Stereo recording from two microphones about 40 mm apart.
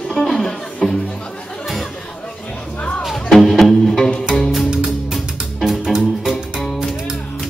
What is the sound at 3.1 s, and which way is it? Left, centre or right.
Music, centre.